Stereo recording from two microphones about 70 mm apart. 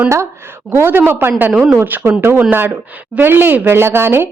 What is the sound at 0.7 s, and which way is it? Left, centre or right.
A woman's voice, right.